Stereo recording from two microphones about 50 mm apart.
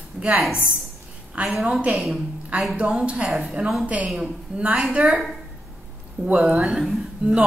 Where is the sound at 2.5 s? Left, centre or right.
Right.